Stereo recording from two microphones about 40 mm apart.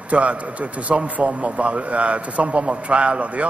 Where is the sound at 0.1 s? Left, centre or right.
Right.